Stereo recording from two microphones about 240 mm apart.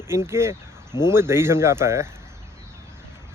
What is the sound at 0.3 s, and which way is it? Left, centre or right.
Speech, centre.